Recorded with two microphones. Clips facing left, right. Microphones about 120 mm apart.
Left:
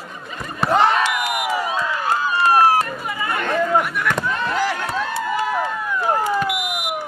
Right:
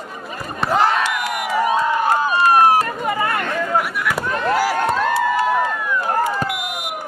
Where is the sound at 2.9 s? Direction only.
55° right (ahead or behind).